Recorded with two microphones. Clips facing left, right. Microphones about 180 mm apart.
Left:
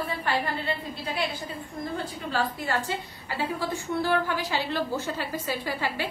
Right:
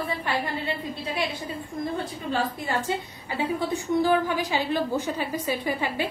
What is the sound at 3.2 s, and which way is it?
A woman's voice, 15° right (ahead or behind).